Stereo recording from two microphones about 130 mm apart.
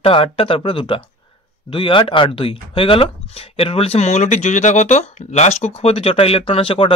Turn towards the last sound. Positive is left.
turn(degrees=45)  # may be behind; listen again after turning